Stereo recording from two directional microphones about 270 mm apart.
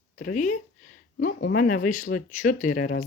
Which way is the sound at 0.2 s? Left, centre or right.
Left.